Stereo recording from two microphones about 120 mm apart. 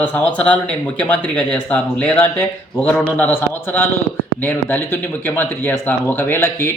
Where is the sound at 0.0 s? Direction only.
10° left (ahead or behind).